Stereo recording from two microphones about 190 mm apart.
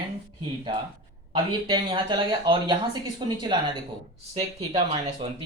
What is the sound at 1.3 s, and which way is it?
Speech, 25° right (ahead or behind).